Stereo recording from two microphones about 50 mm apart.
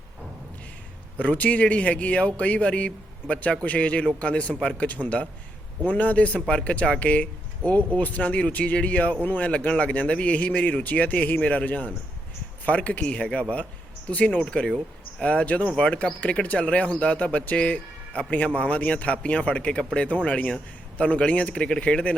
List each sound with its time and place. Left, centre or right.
1.2 s speech: left
4.9 s speech: left
13.2 s speech: centre
14.1 s speech: left